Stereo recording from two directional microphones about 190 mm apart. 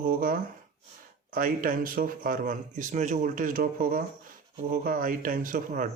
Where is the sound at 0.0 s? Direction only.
50° right (ahead or behind).